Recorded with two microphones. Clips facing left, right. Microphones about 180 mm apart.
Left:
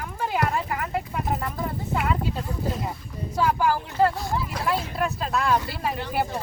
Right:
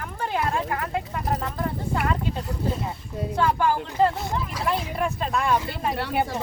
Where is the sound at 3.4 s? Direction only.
5° left (ahead or behind).